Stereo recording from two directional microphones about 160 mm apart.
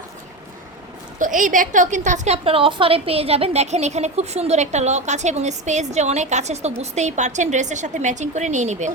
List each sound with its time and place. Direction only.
1.2 s a woman's voice: 55° right (ahead or behind)